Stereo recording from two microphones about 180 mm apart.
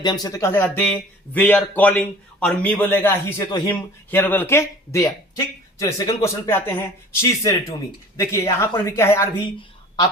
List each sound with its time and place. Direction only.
0.0 s speech: 20° left (ahead or behind)